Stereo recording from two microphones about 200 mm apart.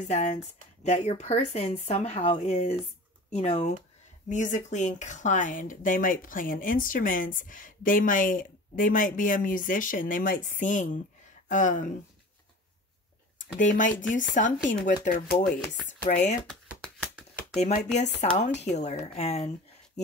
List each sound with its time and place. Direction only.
0.1 s speech: 35° left (ahead or behind)
13.6 s speech: 40° left (ahead or behind)
16.4 s a sound: 5° left (ahead or behind)
17.9 s speech: 35° left (ahead or behind)